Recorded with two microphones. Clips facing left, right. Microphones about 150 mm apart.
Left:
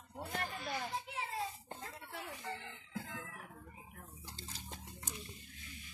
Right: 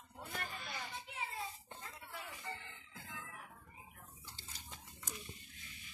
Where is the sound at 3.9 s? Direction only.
40° left (ahead or behind).